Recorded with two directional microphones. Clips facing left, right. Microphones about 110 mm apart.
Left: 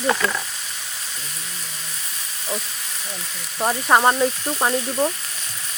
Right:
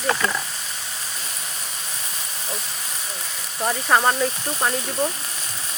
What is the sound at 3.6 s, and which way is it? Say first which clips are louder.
Speech: left 2 dB; 20° left (ahead or behind).